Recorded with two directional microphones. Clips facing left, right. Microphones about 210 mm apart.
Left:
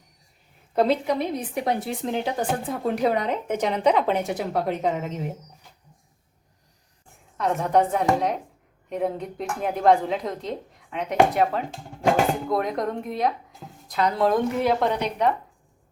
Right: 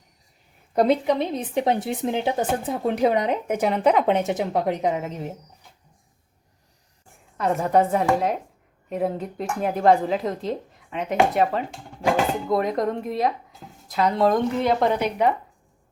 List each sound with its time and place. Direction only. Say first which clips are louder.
0.9 s a woman's voice: right 2 dB; 20° right (ahead or behind); by 4.0 s 5° right (ahead or behind)
4.0 s a woman's voice: right 3 dB; 20° right (ahead or behind); by 5.2 s 5° right (ahead or behind)
7.3 s speech: right 1 dB; centre (ahead or behind)